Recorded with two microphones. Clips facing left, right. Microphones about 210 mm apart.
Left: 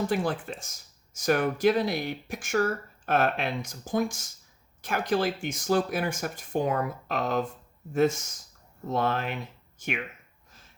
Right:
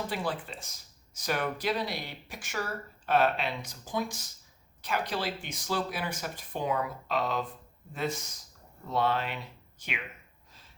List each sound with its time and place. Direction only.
0.1 s speech: 50° left (ahead or behind)